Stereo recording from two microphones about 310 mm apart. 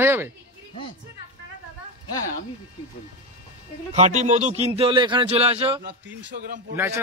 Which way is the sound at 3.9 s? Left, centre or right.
Right.